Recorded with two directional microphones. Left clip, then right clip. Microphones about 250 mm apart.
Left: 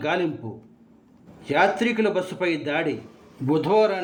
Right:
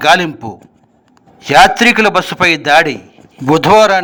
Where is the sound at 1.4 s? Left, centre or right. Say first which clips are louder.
Right 14 dB; right.